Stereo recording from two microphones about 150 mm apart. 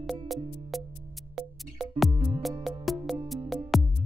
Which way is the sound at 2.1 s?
50° right (ahead or behind).